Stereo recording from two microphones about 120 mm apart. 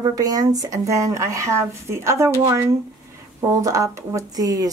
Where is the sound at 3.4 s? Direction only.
25° right (ahead or behind).